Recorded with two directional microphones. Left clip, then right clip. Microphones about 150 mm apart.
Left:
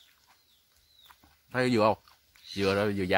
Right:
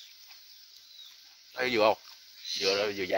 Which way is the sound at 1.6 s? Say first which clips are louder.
Even; 10° left (ahead or behind).